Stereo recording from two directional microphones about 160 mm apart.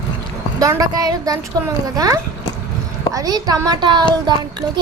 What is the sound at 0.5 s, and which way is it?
A child's voice, 20° right (ahead or behind).